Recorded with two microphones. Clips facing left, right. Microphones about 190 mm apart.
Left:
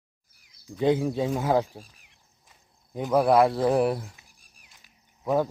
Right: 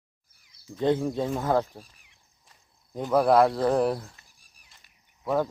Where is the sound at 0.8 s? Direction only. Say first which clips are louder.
Left 1 dB; 10° left (ahead or behind).